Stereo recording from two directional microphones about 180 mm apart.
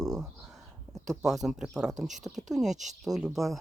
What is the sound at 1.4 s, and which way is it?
Speech, 5° right (ahead or behind).